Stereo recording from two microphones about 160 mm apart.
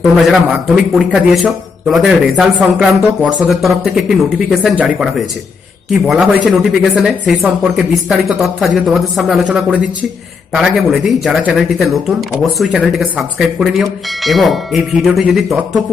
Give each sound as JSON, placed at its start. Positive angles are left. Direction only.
{"t": 0.0, "sound": "speech", "side_deg": 0}